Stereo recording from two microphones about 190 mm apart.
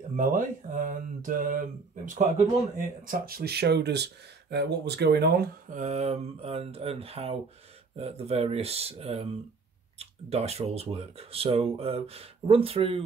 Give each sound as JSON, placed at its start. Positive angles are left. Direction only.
{"t": 0.1, "sound": "speech", "side_deg": -45}